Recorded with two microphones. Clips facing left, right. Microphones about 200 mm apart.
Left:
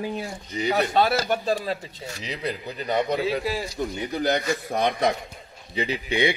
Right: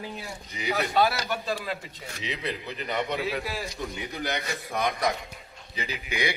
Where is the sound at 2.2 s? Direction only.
40° left (ahead or behind).